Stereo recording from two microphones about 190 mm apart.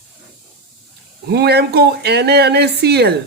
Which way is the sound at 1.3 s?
60° right (ahead or behind).